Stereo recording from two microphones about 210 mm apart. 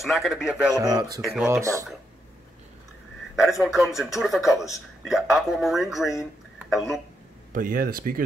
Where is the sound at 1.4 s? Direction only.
15° right (ahead or behind).